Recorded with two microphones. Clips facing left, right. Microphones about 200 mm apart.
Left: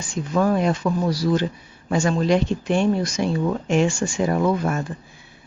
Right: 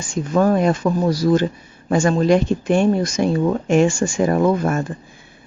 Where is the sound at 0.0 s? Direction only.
45° right (ahead or behind).